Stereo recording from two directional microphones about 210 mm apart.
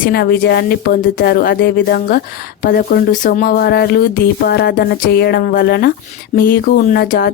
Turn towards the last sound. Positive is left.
turn(degrees=45)  # may be behind; listen again after turning